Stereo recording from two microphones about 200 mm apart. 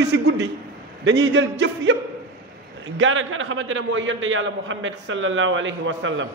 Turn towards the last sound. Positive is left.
turn(degrees=-70)  # may be behind; listen again after turning